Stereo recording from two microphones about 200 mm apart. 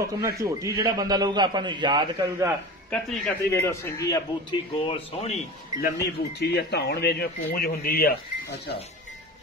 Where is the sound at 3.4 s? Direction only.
15° left (ahead or behind).